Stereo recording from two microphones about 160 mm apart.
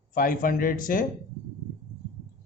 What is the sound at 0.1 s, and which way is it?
Speech, 60° left (ahead or behind).